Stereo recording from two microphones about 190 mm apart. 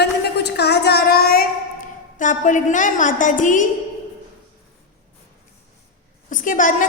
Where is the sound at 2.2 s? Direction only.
40° left (ahead or behind).